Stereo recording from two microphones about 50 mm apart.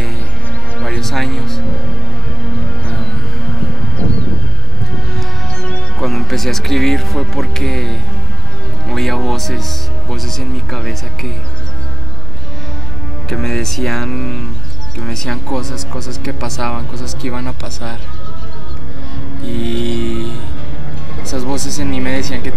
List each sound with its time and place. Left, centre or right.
0.8 s music: centre
5.1 s music: centre
5.5 s music: centre
5.9 s speech: centre
13.3 s speech: centre
19.4 s speech: centre